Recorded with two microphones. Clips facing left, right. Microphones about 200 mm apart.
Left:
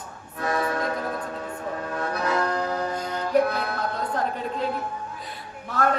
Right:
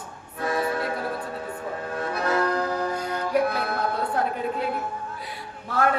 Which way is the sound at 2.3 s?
5° right (ahead or behind).